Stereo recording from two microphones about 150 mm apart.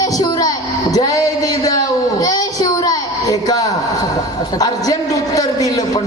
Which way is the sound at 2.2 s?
25° left (ahead or behind).